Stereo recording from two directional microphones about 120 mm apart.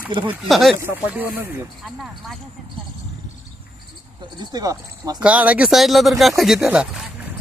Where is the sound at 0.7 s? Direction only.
15° right (ahead or behind).